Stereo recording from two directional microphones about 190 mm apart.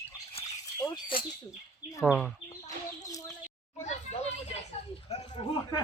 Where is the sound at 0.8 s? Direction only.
25° left (ahead or behind).